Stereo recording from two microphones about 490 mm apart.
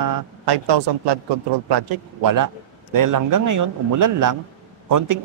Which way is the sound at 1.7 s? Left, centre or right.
Right.